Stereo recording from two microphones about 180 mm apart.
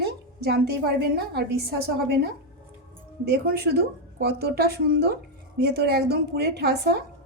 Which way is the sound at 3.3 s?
60° right (ahead or behind).